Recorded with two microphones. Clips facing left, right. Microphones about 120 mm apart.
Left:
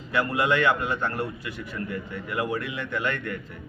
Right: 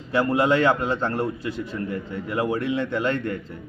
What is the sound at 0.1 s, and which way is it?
A man's voice, 30° right (ahead or behind).